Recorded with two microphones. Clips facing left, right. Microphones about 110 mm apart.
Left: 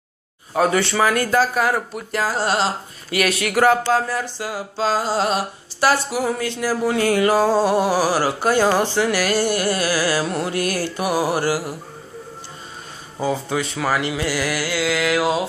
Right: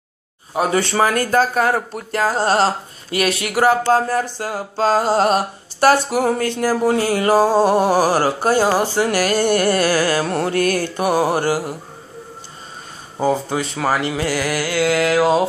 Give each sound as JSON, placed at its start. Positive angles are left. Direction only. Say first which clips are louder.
{"t": 0.7, "sound": "speech", "louder": "right 1 dB", "side_deg": -40}
{"t": 2.1, "sound": "mantra", "louder": "right 4 dB", "side_deg": -50}
{"t": 3.1, "sound": "a sound", "louder": "right 1 dB", "side_deg": -25}
{"t": 3.8, "sound": "mantra", "louder": "right 4 dB", "side_deg": -45}
{"t": 7.8, "sound": "mantra", "louder": "right 3 dB", "side_deg": -50}
{"t": 8.6, "sound": "speech", "louder": "right 1 dB", "side_deg": -10}
{"t": 8.9, "sound": "mantra", "louder": "right 2 dB", "side_deg": -45}
{"t": 11.0, "sound": "a sound", "louder": "right 2 dB", "side_deg": -25}
{"t": 13.2, "sound": "speech", "louder": "right 3 dB", "side_deg": -35}